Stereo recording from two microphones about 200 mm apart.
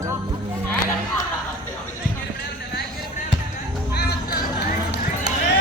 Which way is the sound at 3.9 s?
55° left (ahead or behind).